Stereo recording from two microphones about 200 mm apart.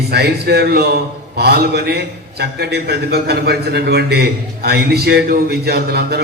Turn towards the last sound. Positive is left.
turn(degrees=-50)  # may be behind; listen again after turning